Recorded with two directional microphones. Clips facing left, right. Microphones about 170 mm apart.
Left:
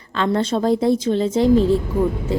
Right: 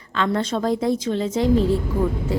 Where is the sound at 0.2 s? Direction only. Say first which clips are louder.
Left 3 dB; 30° left (ahead or behind).